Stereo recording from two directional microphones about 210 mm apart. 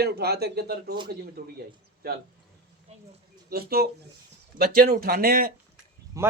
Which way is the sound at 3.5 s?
45° right (ahead or behind).